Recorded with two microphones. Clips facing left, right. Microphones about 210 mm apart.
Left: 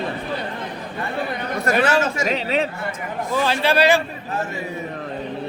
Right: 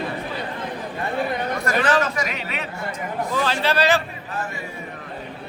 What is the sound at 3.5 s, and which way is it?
Speech, 10° left (ahead or behind).